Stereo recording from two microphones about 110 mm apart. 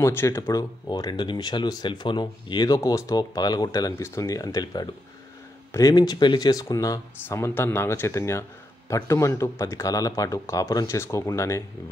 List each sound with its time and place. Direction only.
0.0 s speech: 25° left (ahead or behind)
7.2 s a man's voice: 20° left (ahead or behind)